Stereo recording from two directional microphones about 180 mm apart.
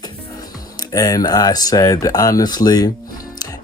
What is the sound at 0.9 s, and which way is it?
Speech, 20° left (ahead or behind).